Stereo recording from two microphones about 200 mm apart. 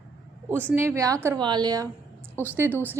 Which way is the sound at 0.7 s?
10° right (ahead or behind).